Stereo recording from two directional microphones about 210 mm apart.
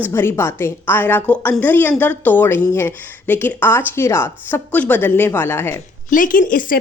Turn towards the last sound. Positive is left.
turn(degrees=40)  # may be behind; listen again after turning